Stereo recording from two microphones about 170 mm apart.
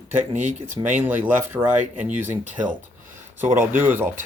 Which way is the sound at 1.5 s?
10° right (ahead or behind).